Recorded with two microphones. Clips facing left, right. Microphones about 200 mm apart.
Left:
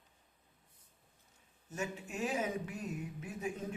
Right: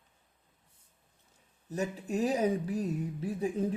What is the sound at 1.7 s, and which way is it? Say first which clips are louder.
Speech: right 8 dB; 35° right (ahead or behind).